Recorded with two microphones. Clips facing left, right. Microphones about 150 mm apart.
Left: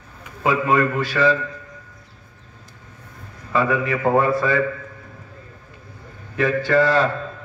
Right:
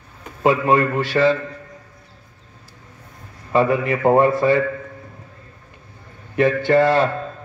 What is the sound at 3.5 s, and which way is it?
A man's voice, 25° right (ahead or behind).